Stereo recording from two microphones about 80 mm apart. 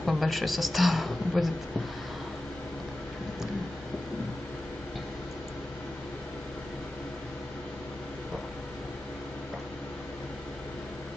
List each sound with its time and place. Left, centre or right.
0.0 s a woman's voice: centre